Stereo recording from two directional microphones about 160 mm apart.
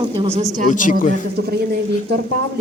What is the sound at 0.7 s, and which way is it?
Speech, 55° left (ahead or behind).